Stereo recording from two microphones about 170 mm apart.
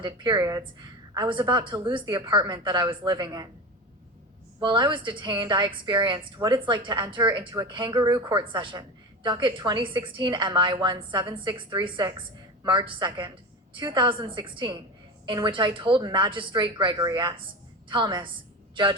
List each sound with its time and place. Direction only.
0.0 s a woman's voice: 25° right (ahead or behind)
4.6 s a woman's voice: 25° right (ahead or behind)